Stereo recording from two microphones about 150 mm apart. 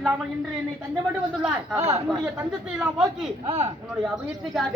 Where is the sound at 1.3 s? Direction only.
5° right (ahead or behind).